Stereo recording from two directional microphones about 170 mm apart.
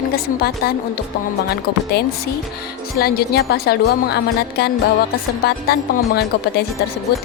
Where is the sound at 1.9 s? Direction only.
70° left (ahead or behind).